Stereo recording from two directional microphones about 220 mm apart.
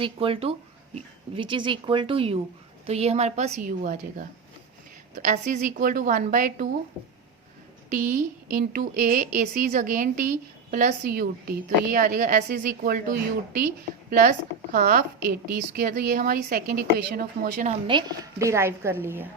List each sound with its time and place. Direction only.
0.0 s a woman's voice: 25° right (ahead or behind)
7.9 s a woman's voice: 35° right (ahead or behind)
17.8 s a woman's voice: 20° right (ahead or behind)